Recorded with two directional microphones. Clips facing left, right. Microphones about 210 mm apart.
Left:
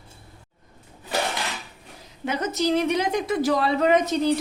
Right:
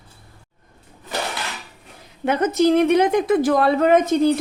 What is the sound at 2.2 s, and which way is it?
A woman's voice, 55° right (ahead or behind).